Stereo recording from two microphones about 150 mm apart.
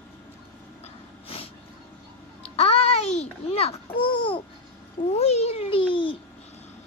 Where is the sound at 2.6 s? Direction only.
40° left (ahead or behind).